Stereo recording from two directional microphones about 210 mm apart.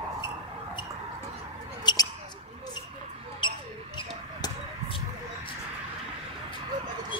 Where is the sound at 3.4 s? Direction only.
20° left (ahead or behind).